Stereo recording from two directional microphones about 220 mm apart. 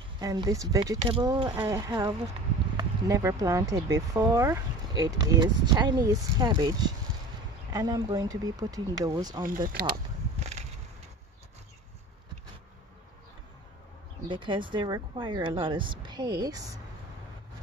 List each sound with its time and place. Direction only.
0.2 s speech: 15° right (ahead or behind)
10.4 s a sound: 30° right (ahead or behind)
14.3 s speech: 20° right (ahead or behind)